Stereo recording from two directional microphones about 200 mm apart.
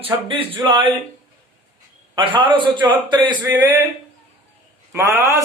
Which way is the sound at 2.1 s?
25° right (ahead or behind).